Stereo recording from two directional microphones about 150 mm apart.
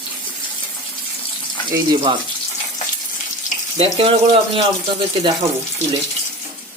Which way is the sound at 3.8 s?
35° right (ahead or behind).